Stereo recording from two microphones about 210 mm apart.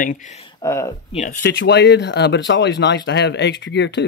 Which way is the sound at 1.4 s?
55° left (ahead or behind).